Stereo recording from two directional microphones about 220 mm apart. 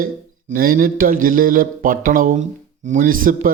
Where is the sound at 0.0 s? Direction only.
40° right (ahead or behind).